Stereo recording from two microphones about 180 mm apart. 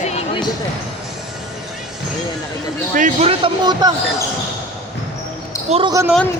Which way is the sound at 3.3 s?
25° right (ahead or behind).